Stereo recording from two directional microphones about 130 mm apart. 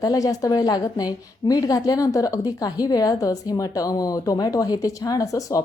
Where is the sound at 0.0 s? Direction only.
30° left (ahead or behind).